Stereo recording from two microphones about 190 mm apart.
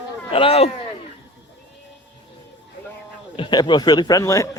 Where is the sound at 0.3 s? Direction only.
30° left (ahead or behind).